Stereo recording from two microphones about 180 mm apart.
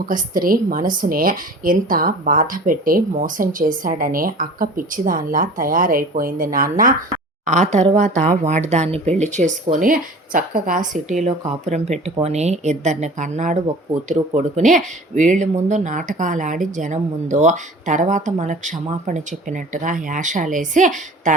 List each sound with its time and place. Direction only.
0.0 s speech: 50° right (ahead or behind)